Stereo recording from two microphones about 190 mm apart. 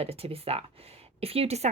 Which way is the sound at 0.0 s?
30° right (ahead or behind).